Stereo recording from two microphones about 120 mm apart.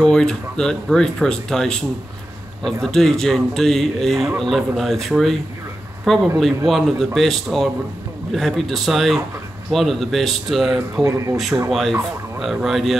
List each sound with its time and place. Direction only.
0.0 s speech: 5° left (ahead or behind)
11.0 s speech: 30° right (ahead or behind)
11.5 s speech: 15° right (ahead or behind)
12.4 s speech: centre (ahead or behind)